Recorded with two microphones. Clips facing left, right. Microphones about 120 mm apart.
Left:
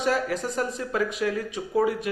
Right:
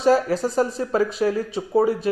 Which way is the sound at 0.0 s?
35° right (ahead or behind).